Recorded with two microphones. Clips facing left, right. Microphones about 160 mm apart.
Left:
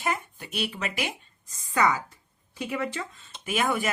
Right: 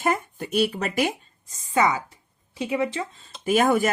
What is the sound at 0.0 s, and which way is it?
Speech, 45° right (ahead or behind).